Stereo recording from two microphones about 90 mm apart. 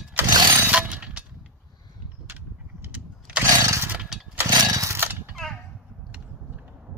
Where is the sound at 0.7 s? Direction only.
10° right (ahead or behind).